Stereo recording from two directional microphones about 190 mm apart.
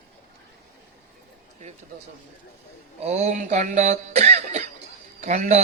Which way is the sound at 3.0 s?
35° right (ahead or behind).